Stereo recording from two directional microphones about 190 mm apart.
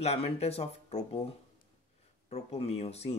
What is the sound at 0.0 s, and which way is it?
Speech, 35° left (ahead or behind).